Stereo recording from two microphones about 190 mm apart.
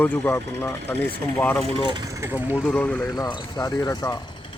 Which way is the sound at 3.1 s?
20° left (ahead or behind).